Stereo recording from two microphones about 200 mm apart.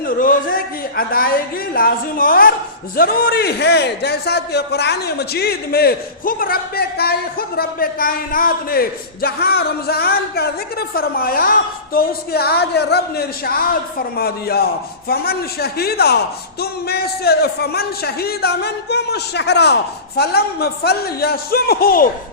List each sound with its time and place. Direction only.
0.0 s a man's voice: 45° left (ahead or behind)